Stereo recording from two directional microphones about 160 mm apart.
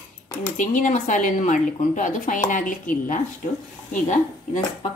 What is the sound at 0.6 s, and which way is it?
Speech, 50° left (ahead or behind).